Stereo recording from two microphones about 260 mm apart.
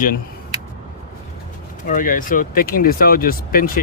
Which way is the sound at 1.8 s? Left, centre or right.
Left.